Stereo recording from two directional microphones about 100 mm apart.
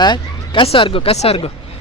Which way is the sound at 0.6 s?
70° left (ahead or behind).